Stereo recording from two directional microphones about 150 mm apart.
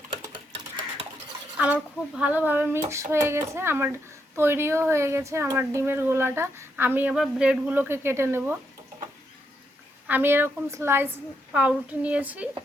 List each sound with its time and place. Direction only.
1.5 s speech: 10° right (ahead or behind)
10.1 s speech: 15° right (ahead or behind)